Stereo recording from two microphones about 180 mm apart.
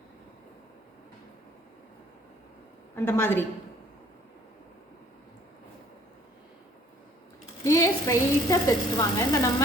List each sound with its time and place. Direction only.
2.9 s a woman's voice: 10° left (ahead or behind)
7.6 s a woman's voice: 20° left (ahead or behind)